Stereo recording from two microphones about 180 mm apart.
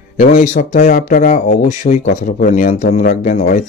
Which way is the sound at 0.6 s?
45° left (ahead or behind).